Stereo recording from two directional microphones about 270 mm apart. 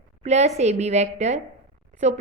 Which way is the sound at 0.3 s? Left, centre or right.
Right.